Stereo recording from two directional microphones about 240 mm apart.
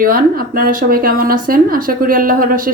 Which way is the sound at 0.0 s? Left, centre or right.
Right.